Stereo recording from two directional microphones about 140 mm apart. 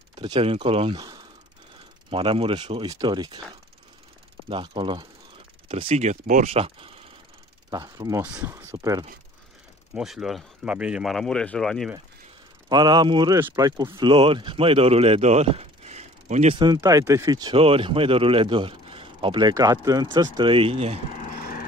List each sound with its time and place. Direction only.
0.1 s a man's voice: 35° right (ahead or behind)
2.0 s a man's voice: 40° right (ahead or behind)
2.9 s speech: 30° right (ahead or behind)
4.5 s a man's voice: 35° right (ahead or behind)
5.7 s speech: 45° right (ahead or behind)
7.7 s speech: 30° right (ahead or behind)
8.4 s speech: 20° right (ahead or behind)
9.9 s speech: centre (ahead or behind)
12.6 s speech: 30° right (ahead or behind); by 16.5 s 55° right (ahead or behind)
16.5 s speech: 30° right (ahead or behind)
17.6 s a man's voice: 40° right (ahead or behind)